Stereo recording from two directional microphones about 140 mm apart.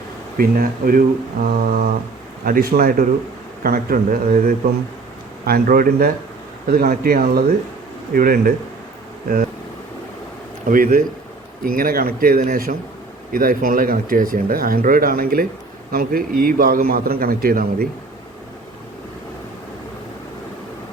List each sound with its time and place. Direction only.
0.3 s speech: 90° right
10.7 s speech: 80° right
11.6 s speech: 90° right